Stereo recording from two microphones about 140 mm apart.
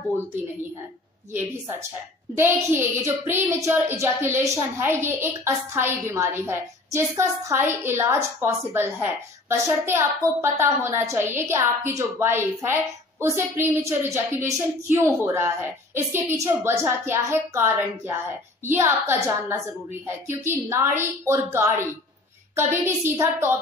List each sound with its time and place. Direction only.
2.3 s a woman's voice: 15° right (ahead or behind)